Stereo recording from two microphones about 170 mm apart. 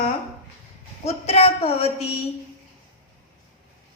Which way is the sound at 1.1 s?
35° left (ahead or behind).